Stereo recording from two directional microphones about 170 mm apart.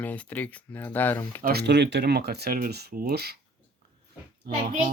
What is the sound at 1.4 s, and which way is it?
Speech, 70° right (ahead or behind).